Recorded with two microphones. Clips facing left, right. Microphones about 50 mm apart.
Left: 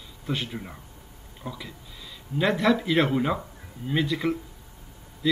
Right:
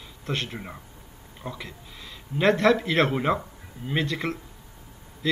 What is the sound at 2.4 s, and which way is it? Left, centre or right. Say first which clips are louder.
Speech: right 3 dB; centre.